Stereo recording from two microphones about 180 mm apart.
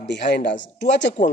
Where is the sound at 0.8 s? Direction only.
80° left.